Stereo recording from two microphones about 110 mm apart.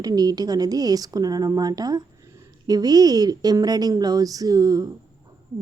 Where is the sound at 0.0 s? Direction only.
35° right (ahead or behind).